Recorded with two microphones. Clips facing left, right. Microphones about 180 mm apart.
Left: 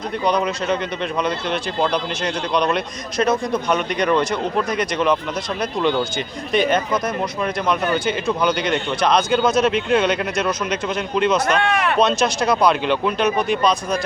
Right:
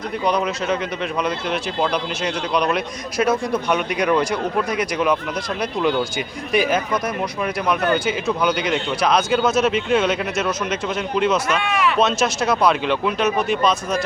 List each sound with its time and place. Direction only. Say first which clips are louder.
0.3 s a man's voice: left 1 dB; 5° right (ahead or behind)
11.6 s speech: left 1 dB; 55° left (ahead or behind)
11.9 s speech: left 1 dB; 5° right (ahead or behind)